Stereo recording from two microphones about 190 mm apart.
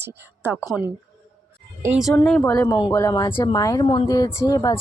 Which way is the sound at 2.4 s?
15° left (ahead or behind).